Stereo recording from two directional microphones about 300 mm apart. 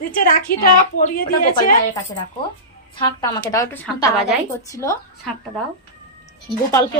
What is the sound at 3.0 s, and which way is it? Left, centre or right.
A woman's voice, centre.